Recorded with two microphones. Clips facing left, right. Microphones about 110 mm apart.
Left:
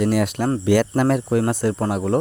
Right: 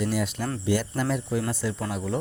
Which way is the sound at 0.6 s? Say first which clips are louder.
Left 8 dB; 75° left (ahead or behind).